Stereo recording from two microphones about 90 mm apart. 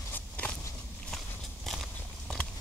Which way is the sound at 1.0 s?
5° left (ahead or behind).